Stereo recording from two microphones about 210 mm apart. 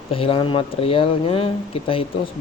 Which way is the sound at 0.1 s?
25° left (ahead or behind).